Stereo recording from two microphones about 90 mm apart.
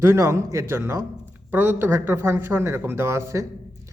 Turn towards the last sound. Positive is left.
turn(degrees=-35)  # may be behind; listen again after turning